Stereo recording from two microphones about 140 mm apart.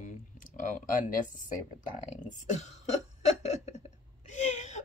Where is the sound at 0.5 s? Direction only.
70° left (ahead or behind).